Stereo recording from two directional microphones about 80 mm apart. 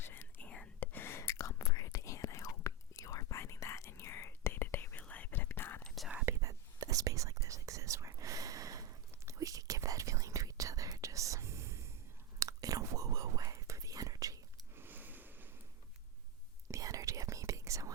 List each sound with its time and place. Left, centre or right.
0.0 s whispering: left
6.4 s whispering: right
12.4 s whispering: right
14.8 s a sound: right
16.7 s whispering: right